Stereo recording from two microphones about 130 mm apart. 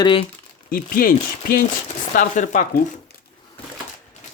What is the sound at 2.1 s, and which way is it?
Chopping, 80° left.